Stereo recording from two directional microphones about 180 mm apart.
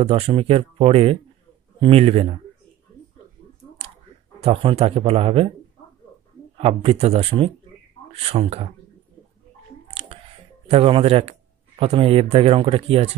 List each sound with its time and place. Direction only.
0.0 s speech: 30° right (ahead or behind)
3.8 s clicking: 35° right (ahead or behind)
4.4 s speech: 30° right (ahead or behind)
6.6 s speech: 30° right (ahead or behind)
10.0 s music: 35° right (ahead or behind)
10.7 s speech: 35° right (ahead or behind)